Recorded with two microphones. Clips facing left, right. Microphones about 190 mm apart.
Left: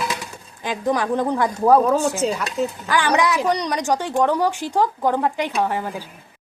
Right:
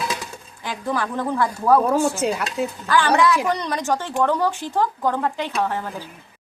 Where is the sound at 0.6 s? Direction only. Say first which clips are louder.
Left 4 dB; 20° left (ahead or behind).